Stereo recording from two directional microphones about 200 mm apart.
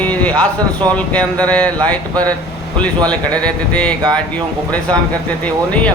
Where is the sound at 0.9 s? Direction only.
5° left (ahead or behind).